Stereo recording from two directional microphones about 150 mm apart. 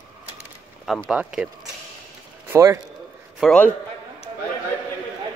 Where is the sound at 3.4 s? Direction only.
5° right (ahead or behind).